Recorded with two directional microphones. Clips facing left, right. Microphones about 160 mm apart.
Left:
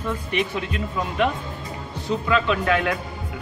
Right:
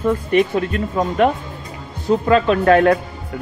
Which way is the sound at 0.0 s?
45° right (ahead or behind).